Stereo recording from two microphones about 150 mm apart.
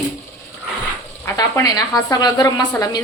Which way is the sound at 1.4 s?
25° left (ahead or behind).